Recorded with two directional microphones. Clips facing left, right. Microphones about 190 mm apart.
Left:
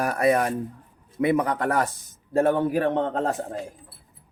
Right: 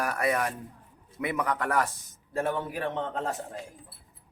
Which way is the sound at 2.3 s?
50° left (ahead or behind).